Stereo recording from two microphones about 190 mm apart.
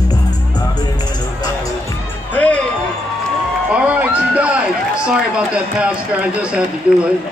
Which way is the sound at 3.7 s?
5° right (ahead or behind).